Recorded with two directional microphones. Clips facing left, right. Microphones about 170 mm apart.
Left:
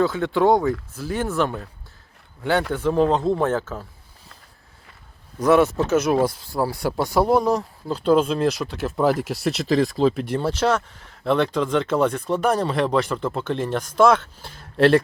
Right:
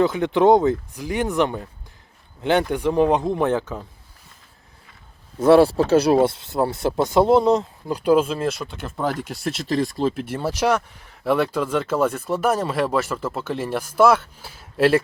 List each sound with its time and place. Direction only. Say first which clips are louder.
0.0 s speech: right 2 dB; 20° right (ahead or behind)
5.4 s speech: right 3 dB; 30° right (ahead or behind)
7.9 s speech: even; 10° right (ahead or behind)